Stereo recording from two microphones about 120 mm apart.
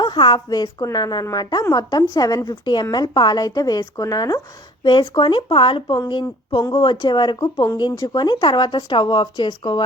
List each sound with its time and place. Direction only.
0.0 s speech: 40° left (ahead or behind)
4.8 s speech: 40° left (ahead or behind)